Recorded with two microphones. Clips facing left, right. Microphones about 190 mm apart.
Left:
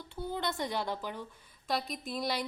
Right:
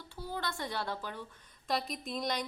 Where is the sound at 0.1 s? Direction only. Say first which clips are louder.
Left 4 dB; 20° left (ahead or behind).